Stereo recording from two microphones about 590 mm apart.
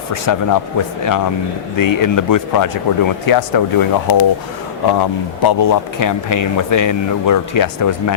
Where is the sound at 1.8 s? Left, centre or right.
Left.